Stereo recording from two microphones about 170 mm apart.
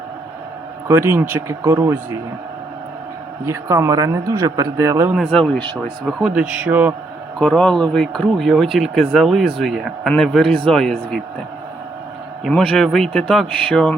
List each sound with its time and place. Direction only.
0.9 s speech: 15° right (ahead or behind)
3.4 s a man's voice: 15° right (ahead or behind)
5.1 s speech: 5° left (ahead or behind)
7.3 s speech: 5° left (ahead or behind)
12.5 s speech: 5° left (ahead or behind)